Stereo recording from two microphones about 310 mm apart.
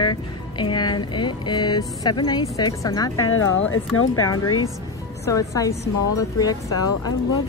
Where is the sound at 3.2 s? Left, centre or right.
Left.